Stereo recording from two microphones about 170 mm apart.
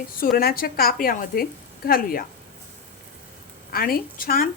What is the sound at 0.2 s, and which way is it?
Speech, 60° left (ahead or behind).